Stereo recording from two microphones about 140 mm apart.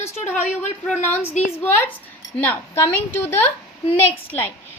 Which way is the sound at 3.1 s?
15° left (ahead or behind).